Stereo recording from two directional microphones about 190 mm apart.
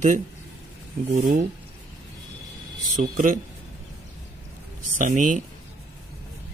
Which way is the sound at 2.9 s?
45° right (ahead or behind).